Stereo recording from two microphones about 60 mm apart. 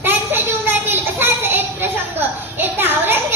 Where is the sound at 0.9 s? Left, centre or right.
Right.